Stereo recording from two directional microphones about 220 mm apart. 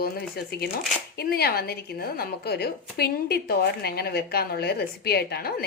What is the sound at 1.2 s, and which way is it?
A woman's voice, 45° left (ahead or behind).